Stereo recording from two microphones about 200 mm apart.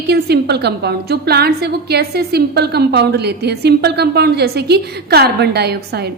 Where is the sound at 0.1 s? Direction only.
55° right (ahead or behind).